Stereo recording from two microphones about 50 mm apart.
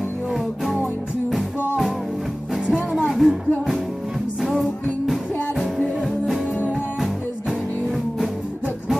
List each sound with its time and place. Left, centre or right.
2.6 s music: centre
3.1 s music: centre